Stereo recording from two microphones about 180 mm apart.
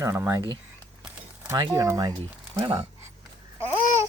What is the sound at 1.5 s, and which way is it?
Speech, 20° right (ahead or behind).